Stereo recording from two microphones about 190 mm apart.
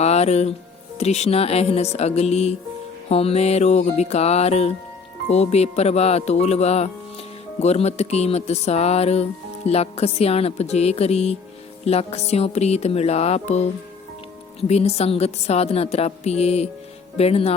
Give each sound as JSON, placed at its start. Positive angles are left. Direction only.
{"t": 0.0, "sound": "speech", "side_deg": 35}
{"t": 0.9, "sound": "music", "side_deg": 35}
{"t": 14.7, "sound": "music", "side_deg": 35}